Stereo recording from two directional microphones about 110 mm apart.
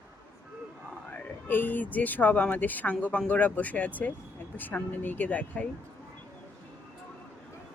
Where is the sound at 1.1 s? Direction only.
20° left (ahead or behind).